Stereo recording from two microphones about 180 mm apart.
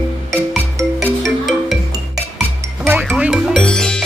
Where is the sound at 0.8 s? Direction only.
15° right (ahead or behind).